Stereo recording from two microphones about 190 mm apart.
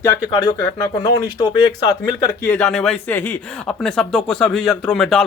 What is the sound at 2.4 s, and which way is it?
Speech, 10° left (ahead or behind).